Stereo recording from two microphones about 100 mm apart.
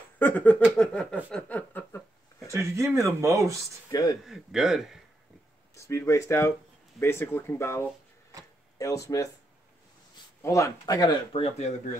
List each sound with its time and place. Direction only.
0.2 s speech: 15° left (ahead or behind)
2.4 s speech: 30° right (ahead or behind)
3.9 s speech: 35° left (ahead or behind)
4.2 s a man's voice: 5° right (ahead or behind)
5.8 s speech: 30° left (ahead or behind)
8.3 s a sound: 35° right (ahead or behind)
8.7 s speech: 35° left (ahead or behind)
10.4 s speech: 30° left (ahead or behind)
11.3 s speech: 90° left